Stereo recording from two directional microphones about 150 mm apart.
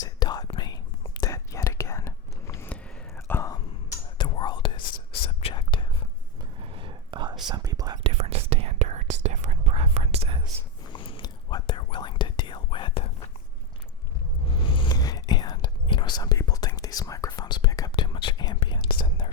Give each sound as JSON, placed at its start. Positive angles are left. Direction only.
{"t": 0.0, "sound": "whispering", "side_deg": 30}
{"t": 3.5, "sound": "whispering", "side_deg": 30}
{"t": 6.4, "sound": "whispering", "side_deg": -35}
{"t": 8.0, "sound": "whispering", "side_deg": -45}
{"t": 10.9, "sound": "whispering", "side_deg": 35}
{"t": 14.6, "sound": "whispering", "side_deg": 35}